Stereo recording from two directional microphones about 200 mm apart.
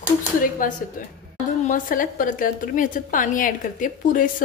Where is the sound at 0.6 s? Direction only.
45° left (ahead or behind).